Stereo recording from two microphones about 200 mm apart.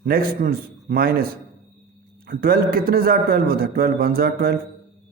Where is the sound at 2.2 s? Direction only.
45° right (ahead or behind).